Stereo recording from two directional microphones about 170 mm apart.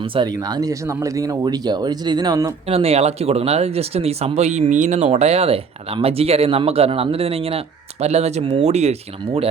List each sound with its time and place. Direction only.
0.0 s speech: 30° right (ahead or behind)
2.6 s speech: 35° right (ahead or behind)